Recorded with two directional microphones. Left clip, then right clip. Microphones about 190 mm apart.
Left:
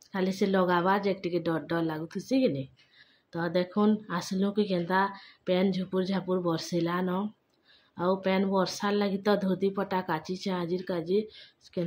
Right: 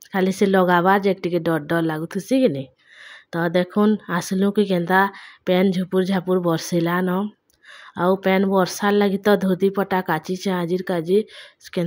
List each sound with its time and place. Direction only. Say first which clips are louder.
0.1 s speech: right 10 dB; 50° right (ahead or behind)